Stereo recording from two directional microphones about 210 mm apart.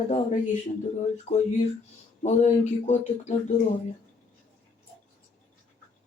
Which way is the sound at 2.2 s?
35° left (ahead or behind).